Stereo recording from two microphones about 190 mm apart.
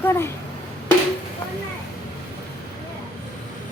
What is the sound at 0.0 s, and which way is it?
Speech, 15° left (ahead or behind).